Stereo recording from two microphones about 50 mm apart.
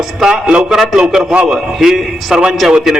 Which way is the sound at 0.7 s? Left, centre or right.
Centre.